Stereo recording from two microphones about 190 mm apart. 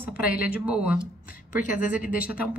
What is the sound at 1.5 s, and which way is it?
Speech, 45° left (ahead or behind).